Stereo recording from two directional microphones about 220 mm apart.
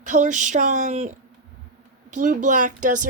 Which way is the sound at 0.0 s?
35° right (ahead or behind).